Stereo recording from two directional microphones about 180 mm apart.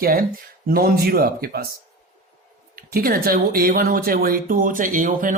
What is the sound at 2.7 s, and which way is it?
Speech, 55° right (ahead or behind).